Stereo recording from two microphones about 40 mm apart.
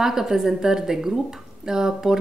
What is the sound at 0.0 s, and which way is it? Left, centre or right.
A woman's voice, centre.